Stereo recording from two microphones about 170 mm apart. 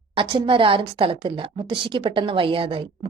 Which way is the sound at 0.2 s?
30° right (ahead or behind).